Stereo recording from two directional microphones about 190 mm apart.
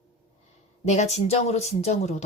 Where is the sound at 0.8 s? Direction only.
35° left (ahead or behind).